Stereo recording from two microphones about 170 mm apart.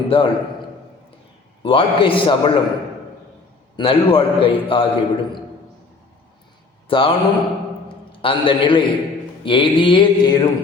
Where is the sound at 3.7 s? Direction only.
30° left (ahead or behind).